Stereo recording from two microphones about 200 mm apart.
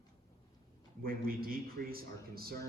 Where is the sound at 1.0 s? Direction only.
45° right (ahead or behind).